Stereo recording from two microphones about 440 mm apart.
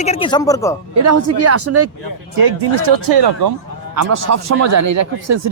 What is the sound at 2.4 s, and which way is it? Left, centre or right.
Speech, right.